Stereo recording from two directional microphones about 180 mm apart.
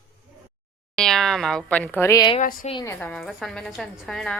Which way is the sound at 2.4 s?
50° left (ahead or behind).